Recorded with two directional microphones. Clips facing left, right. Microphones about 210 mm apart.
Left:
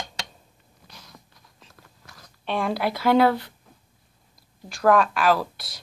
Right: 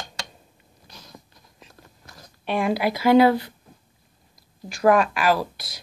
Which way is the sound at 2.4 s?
10° right (ahead or behind).